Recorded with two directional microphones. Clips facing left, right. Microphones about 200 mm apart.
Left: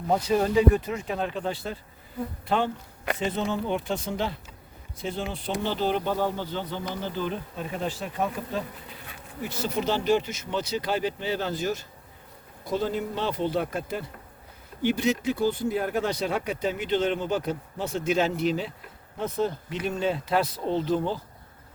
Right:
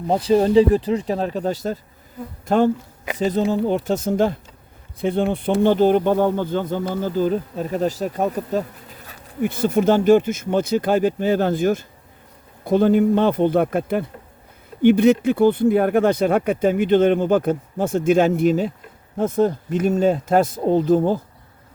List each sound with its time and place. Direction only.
0.1 s speech: 30° right (ahead or behind); by 4.4 s 45° right (ahead or behind)
4.9 s speech: 55° right (ahead or behind); by 8.6 s 40° right (ahead or behind)
9.4 s speech: 55° right (ahead or behind)